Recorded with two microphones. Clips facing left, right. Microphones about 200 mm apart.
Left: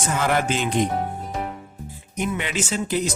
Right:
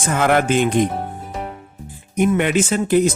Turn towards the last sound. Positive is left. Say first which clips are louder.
# right 8 dB
turn(degrees=-55)  # may be behind; listen again after turning